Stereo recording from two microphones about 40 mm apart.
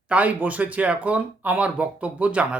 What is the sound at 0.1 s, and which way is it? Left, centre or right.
Speech, right.